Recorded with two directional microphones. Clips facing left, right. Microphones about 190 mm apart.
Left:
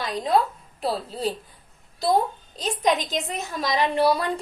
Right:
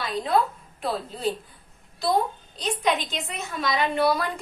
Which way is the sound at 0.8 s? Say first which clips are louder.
Left 2 dB; 35° left (ahead or behind).